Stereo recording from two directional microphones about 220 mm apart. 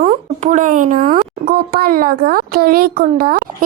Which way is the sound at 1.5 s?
40° right (ahead or behind).